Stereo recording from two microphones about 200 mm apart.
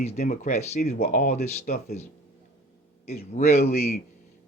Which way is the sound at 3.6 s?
50° left (ahead or behind).